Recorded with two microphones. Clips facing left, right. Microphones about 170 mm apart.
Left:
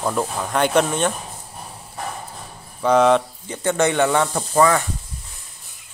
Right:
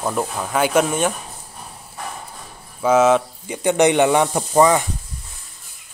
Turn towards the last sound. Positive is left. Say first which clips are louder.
# right 2 dB
turn(degrees=-15)  # may be behind; listen again after turning